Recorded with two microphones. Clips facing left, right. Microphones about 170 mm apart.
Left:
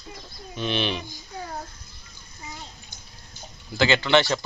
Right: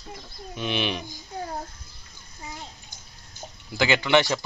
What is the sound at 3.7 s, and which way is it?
Speech, 15° right (ahead or behind).